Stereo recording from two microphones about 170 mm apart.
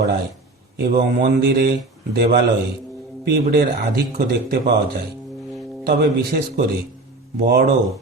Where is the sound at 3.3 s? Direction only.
70° right (ahead or behind).